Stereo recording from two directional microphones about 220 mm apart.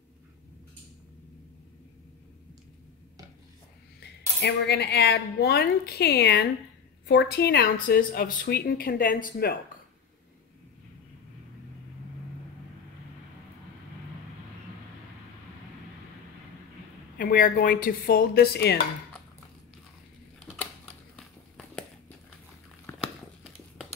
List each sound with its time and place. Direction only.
4.0 s speech: 50° left (ahead or behind)
17.2 s speech: 40° left (ahead or behind)
22.9 s crumpling: 10° left (ahead or behind)